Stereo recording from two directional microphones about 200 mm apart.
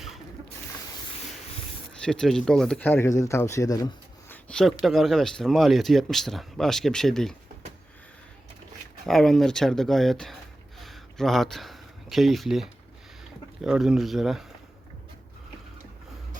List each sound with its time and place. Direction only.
2.0 s speech: 5° left (ahead or behind)
4.3 s speech: 5° left (ahead or behind)
9.0 s speech: centre (ahead or behind)
10.8 s a sound: centre (ahead or behind)
13.6 s speech: 5° right (ahead or behind)